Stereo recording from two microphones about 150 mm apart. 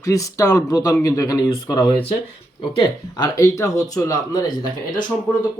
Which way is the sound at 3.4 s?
20° left (ahead or behind).